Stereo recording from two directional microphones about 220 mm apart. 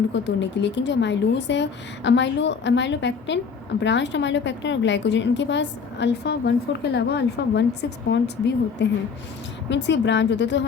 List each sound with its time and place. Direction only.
0.1 s a woman's voice: 55° left (ahead or behind)